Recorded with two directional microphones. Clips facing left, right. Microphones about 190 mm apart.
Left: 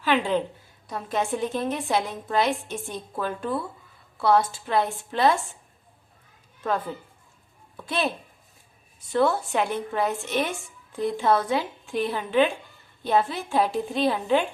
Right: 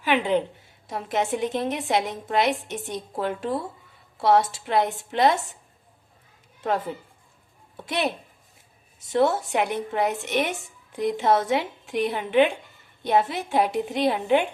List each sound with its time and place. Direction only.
0.0 s a woman's voice: 20° right (ahead or behind)
6.6 s a woman's voice: 25° right (ahead or behind)
9.1 s a woman's voice: 20° right (ahead or behind)